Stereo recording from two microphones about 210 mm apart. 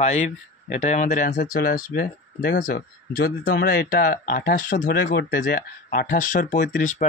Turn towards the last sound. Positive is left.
turn(degrees=35)  # may be behind; listen again after turning